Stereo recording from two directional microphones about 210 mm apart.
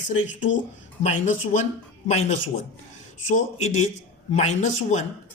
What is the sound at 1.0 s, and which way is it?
Speech, 35° left (ahead or behind).